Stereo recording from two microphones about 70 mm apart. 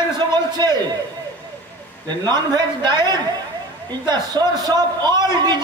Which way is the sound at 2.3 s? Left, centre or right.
Right.